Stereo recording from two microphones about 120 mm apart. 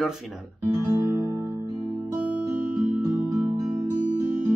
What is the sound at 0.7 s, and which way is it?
Music, 30° right (ahead or behind).